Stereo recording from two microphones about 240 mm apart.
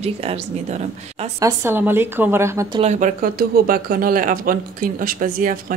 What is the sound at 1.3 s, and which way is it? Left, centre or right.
Speech, centre.